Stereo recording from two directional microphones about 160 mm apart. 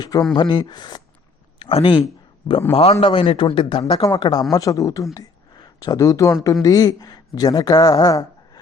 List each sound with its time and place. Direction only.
0.0 s a man's voice: 25° left (ahead or behind)